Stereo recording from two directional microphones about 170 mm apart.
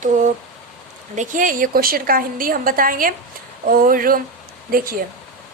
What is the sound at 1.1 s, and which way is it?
A woman's voice, 50° right (ahead or behind).